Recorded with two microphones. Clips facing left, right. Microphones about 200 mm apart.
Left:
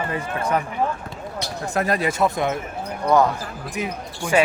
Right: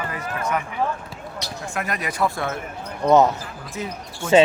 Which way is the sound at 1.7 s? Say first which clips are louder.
Left 7 dB; 35° left (ahead or behind).